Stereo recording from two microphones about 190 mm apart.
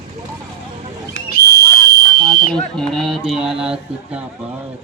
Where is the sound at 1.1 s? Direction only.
55° left (ahead or behind).